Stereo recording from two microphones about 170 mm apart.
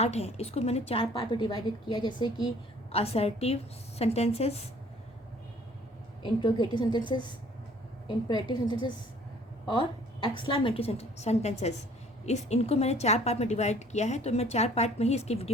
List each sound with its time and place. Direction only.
0.0 s a woman's voice: 40° left (ahead or behind)
1.1 s a woman's voice: 25° left (ahead or behind)
2.9 s a woman's voice: 35° left (ahead or behind)
6.2 s a woman's voice: 25° left (ahead or behind)
10.2 s a woman's voice: 30° left (ahead or behind)